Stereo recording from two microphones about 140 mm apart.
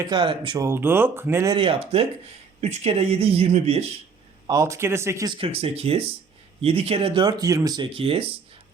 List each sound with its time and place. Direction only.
0.0 s speech: 35° right (ahead or behind)
0.6 s speech: 15° right (ahead or behind)
1.5 s speech: 40° right (ahead or behind)
4.4 s speech: 20° right (ahead or behind)
5.3 s speech: 40° right (ahead or behind); by 7.9 s 25° right (ahead or behind)
7.9 s speech: 40° right (ahead or behind)